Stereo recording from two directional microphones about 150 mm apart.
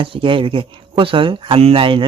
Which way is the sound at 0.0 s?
35° right (ahead or behind).